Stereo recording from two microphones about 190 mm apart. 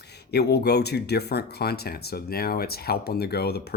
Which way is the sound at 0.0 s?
60° left (ahead or behind).